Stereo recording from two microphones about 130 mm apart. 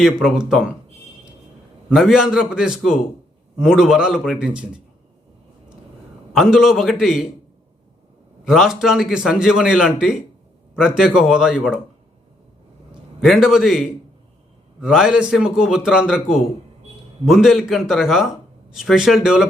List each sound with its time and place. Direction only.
0.0 s a man's voice: 5° right (ahead or behind)
1.9 s a man's voice: centre (ahead or behind)
6.3 s a man's voice: 5° right (ahead or behind)
8.4 s a man's voice: 5° right (ahead or behind)
13.2 s a man's voice: 5° right (ahead or behind)